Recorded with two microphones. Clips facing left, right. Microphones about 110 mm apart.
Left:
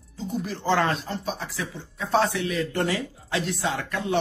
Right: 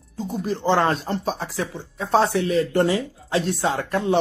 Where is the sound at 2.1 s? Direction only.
35° right (ahead or behind).